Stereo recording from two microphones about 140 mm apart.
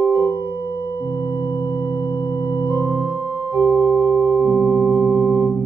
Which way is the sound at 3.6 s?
5° right (ahead or behind).